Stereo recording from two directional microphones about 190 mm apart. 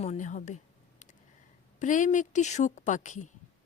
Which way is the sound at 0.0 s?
40° left (ahead or behind).